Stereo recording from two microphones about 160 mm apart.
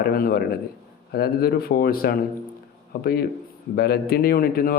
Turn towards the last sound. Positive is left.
turn(degrees=65)  # may be behind; listen again after turning